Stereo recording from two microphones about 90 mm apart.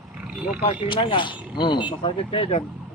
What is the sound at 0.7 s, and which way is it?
Speech, 70° left (ahead or behind).